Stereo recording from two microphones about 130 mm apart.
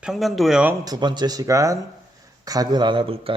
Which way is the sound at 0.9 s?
35° right (ahead or behind).